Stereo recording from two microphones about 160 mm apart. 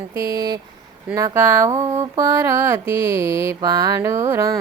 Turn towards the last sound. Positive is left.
turn(degrees=-20)  # may be behind; listen again after turning